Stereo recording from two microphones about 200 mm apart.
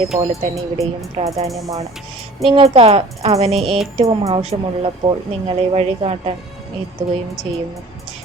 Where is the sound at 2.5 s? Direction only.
25° right (ahead or behind).